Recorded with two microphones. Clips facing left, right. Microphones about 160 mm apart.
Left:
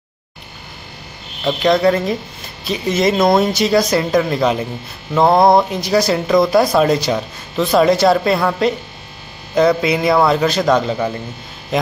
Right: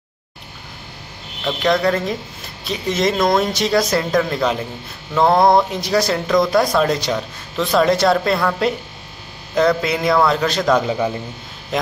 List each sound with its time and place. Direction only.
1.6 s speech: 5° left (ahead or behind)
10.8 s a man's voice: 10° right (ahead or behind)